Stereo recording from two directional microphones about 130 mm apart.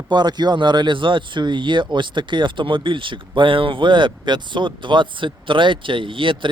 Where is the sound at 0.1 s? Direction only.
35° right (ahead or behind).